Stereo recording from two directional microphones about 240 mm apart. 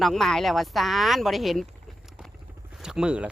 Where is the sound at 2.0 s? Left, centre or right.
Centre.